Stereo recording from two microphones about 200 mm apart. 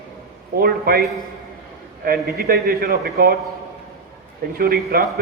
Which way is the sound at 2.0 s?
50° right (ahead or behind).